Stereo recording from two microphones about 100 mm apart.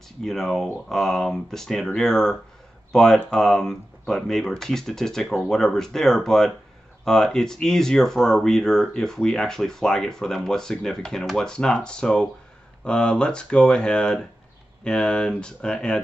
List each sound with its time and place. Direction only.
0.2 s speech: 5° left (ahead or behind)